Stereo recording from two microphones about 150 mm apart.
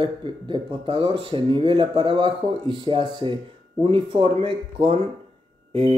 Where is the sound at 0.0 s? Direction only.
35° right (ahead or behind).